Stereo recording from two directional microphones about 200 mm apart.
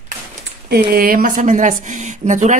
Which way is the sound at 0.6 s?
50° right (ahead or behind).